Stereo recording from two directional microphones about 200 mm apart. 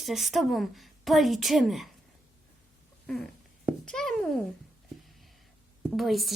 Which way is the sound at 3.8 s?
Centre (ahead or behind).